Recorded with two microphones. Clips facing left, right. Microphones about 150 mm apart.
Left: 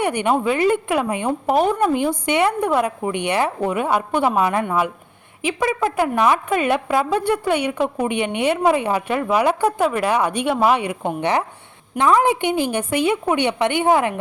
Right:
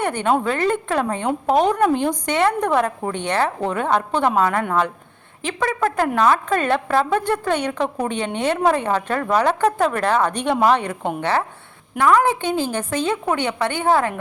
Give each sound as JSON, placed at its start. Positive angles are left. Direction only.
{"t": 0.0, "sound": "a woman's voice", "side_deg": 15}